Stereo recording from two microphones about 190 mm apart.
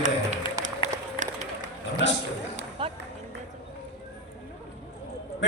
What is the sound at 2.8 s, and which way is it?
Run, 25° right (ahead or behind).